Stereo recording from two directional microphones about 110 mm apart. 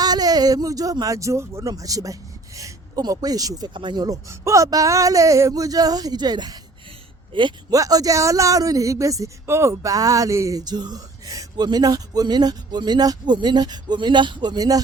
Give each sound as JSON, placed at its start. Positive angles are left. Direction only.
{"t": 0.0, "sound": "speech", "side_deg": -35}
{"t": 4.3, "sound": "speech", "side_deg": -25}
{"t": 7.7, "sound": "speech", "side_deg": -35}